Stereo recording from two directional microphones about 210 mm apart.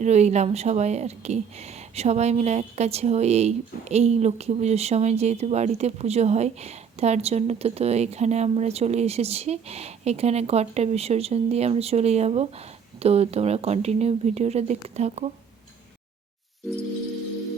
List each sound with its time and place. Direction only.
0.0 s a woman's voice: 30° right (ahead or behind)